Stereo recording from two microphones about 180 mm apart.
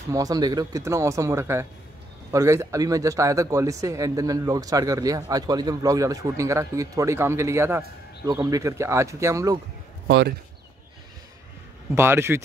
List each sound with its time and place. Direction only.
0.1 s speech: 20° right (ahead or behind)
10.0 s speech: 70° right (ahead or behind)
11.9 s speech: 15° right (ahead or behind)